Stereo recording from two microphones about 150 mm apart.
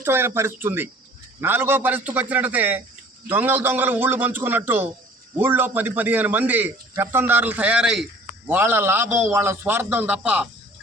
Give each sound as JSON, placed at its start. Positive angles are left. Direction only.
{"t": 0.0, "sound": "a man's voice", "side_deg": -15}